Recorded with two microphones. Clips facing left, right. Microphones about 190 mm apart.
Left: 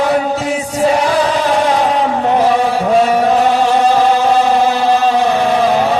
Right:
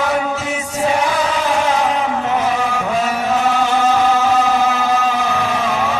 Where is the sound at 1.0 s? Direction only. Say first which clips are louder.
Left 4 dB; 35° left (ahead or behind).